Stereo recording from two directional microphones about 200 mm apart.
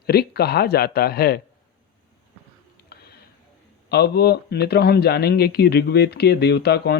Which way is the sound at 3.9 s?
55° left (ahead or behind).